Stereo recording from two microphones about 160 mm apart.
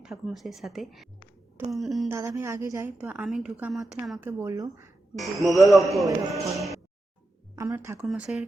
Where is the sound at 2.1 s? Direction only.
15° right (ahead or behind); by 4.2 s centre (ahead or behind).